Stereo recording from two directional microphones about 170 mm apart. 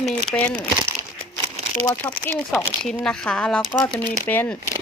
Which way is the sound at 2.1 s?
10° left (ahead or behind).